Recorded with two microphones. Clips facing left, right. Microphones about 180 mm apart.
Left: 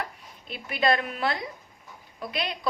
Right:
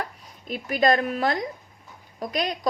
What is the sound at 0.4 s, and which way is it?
A woman's voice, 40° right (ahead or behind).